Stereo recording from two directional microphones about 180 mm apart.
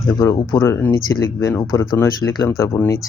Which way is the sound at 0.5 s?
15° left (ahead or behind).